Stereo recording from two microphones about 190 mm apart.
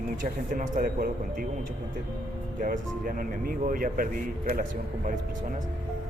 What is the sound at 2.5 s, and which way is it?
Speech, 45° right (ahead or behind).